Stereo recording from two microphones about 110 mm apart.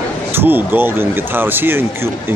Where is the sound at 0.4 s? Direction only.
20° right (ahead or behind).